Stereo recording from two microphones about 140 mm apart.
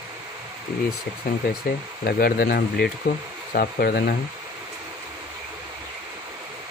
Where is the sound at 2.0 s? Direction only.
90° left.